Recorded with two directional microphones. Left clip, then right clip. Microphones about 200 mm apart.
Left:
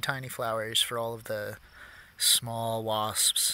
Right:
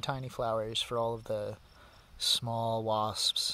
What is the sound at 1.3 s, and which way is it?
Speech, centre (ahead or behind).